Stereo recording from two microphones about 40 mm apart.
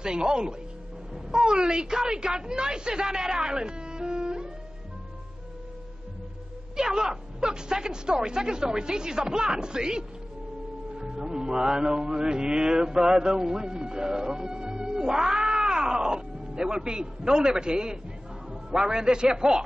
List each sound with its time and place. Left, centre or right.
0.0 s a woman's voice: centre
6.8 s a woman's voice: centre
11.0 s music: centre
18.5 s a man's voice: centre